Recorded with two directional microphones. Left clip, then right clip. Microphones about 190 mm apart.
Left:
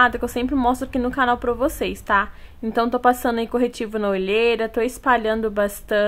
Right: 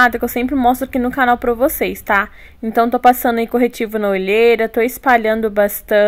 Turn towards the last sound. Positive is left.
turn(degrees=-20)  # may be behind; listen again after turning